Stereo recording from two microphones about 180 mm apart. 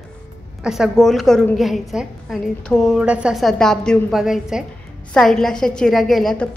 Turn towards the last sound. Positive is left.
turn(degrees=0)  # may be behind; listen again after turning